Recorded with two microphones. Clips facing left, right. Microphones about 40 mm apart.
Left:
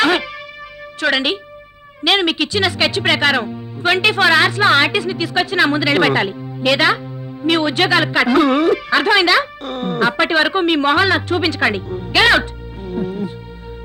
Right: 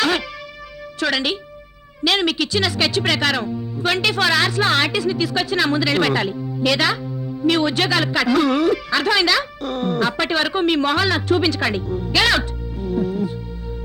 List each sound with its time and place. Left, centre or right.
0.0 s music: left
0.9 s a woman's voice: left